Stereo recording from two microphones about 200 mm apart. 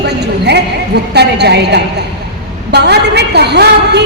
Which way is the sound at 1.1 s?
55° right (ahead or behind).